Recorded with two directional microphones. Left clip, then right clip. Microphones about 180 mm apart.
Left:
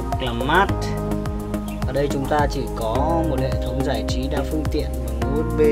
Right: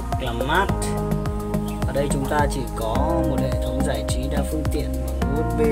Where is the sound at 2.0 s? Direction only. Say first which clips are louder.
Left 2 dB; 20° left (ahead or behind).